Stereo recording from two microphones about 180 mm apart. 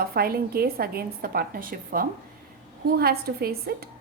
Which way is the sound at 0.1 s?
55° right (ahead or behind).